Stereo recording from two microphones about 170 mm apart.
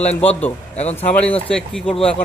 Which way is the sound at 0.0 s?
40° left (ahead or behind).